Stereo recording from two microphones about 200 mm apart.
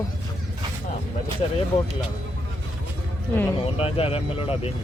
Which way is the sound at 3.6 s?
30° left (ahead or behind).